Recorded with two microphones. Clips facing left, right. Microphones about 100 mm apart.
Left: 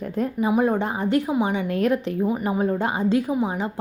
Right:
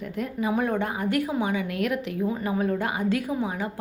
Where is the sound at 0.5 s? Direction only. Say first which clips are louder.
Left 4 dB; 20° left (ahead or behind).